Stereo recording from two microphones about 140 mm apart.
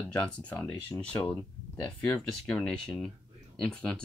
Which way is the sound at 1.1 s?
20° left (ahead or behind).